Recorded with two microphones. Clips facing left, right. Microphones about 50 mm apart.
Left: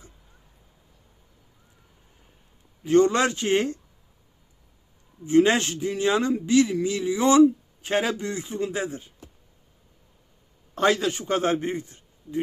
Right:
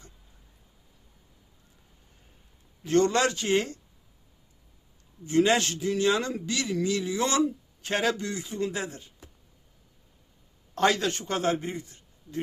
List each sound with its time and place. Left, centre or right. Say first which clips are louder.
2.8 s a man's voice: left 4 dB; centre
5.2 s a man's voice: left 4 dB; left
8.2 s a man's voice: left 2 dB; left
10.8 s a man's voice: left 2 dB; centre
11.3 s speech: left 5 dB; left